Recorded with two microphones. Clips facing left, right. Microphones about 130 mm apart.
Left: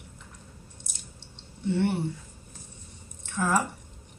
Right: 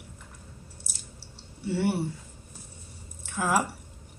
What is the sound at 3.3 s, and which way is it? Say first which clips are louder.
Speech: even; 10° right (ahead or behind).